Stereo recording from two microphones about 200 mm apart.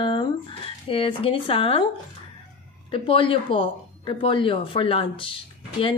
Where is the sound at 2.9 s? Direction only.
25° left (ahead or behind).